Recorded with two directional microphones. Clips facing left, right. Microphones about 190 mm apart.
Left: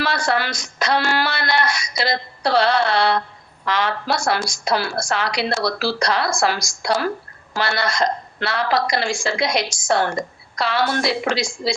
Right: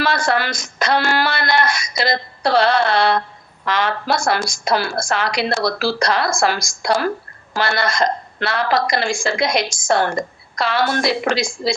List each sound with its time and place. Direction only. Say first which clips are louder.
0.0 s a woman's voice: right 2 dB; 50° right (ahead or behind)